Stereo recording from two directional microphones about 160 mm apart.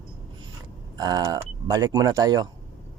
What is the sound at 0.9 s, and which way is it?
Speech, 25° right (ahead or behind).